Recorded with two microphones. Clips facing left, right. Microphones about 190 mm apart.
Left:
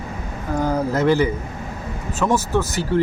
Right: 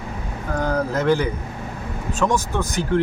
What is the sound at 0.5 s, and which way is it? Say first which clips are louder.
Speech: left 2 dB; 10° left (ahead or behind).